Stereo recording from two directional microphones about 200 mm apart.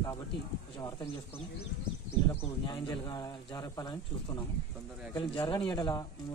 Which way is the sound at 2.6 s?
20° left (ahead or behind).